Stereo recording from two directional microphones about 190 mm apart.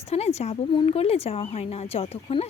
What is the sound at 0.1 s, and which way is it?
Speech, 35° left (ahead or behind).